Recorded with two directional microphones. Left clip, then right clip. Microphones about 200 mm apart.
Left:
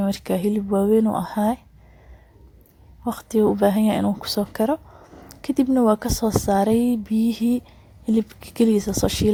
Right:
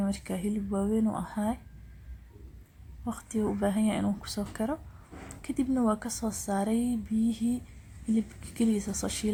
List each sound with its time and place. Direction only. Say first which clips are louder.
0.0 s a woman's voice: left 11 dB; 40° left (ahead or behind)
3.0 s a woman's voice: left 13 dB; 40° left (ahead or behind)